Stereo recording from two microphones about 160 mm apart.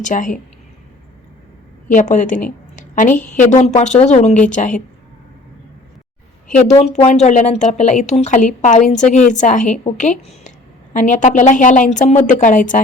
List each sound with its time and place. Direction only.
0.0 s speech: 50° left (ahead or behind)
1.9 s a woman's voice: 50° left (ahead or behind)
6.5 s speech: 45° left (ahead or behind)